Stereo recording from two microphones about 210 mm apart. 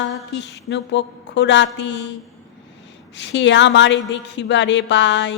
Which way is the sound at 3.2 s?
60° left (ahead or behind).